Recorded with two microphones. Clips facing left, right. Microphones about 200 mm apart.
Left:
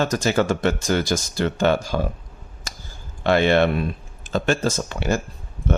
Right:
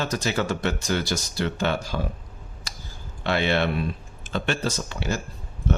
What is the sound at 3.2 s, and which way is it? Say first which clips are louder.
Speech: left 6 dB; 50° left (ahead or behind).